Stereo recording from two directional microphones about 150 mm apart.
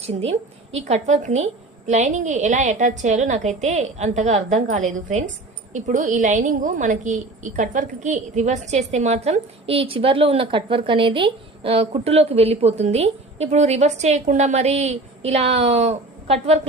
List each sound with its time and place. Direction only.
0.0 s a woman's voice: 45° right (ahead or behind)